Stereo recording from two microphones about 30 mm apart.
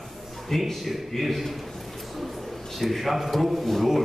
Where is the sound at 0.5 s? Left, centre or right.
Centre.